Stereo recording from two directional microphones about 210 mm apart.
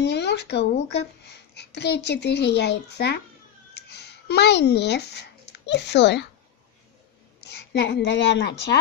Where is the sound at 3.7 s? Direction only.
50° left (ahead or behind).